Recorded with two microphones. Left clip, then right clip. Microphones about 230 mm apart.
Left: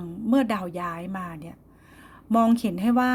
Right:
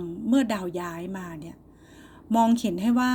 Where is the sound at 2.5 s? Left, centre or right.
Left.